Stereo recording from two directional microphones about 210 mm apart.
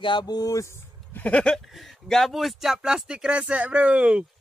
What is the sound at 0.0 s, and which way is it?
Speech, 20° left (ahead or behind).